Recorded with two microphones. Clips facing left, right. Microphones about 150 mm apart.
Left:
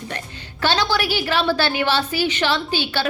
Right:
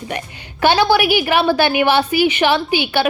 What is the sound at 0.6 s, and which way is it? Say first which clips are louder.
A woman's voice: right 7 dB; 15° right (ahead or behind).